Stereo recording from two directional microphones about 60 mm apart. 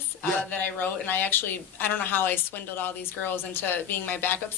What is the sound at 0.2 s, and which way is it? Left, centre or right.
A woman's voice, left.